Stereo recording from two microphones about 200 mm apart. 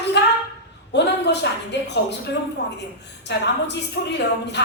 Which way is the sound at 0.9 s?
60° left (ahead or behind).